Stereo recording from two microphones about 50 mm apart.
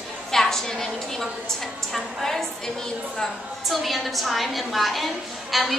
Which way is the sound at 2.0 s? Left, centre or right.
Centre.